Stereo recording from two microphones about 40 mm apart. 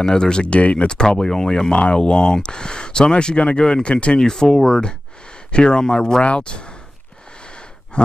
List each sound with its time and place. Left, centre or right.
0.0 s speech: centre
0.5 s speech: left
0.8 s speech: centre
4.2 s speech: centre
7.9 s a sound: left